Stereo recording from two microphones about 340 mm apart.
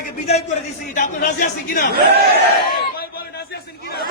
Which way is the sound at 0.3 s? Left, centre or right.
Centre.